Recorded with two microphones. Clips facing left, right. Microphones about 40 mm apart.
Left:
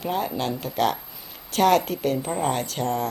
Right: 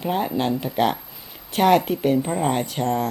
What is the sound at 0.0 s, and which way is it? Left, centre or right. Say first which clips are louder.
Speech: right 3 dB; centre.